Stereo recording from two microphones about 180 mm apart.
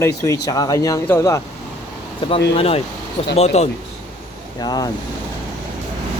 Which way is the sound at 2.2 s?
30° left (ahead or behind).